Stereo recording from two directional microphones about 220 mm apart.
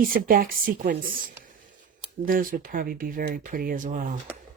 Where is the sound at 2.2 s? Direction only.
40° right (ahead or behind).